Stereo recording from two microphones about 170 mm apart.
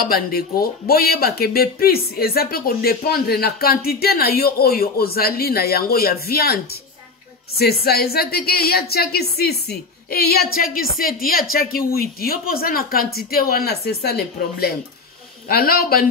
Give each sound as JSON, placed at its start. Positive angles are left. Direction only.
{"t": 0.0, "sound": "a woman's voice", "side_deg": 65}